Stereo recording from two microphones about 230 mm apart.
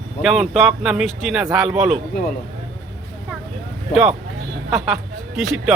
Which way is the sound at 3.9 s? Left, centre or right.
Centre.